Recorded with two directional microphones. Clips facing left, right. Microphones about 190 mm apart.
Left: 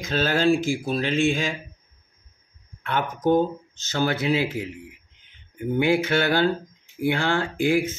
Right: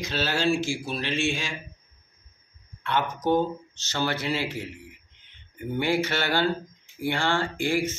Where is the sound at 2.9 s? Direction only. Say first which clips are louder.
Left 3 dB; 50° left (ahead or behind).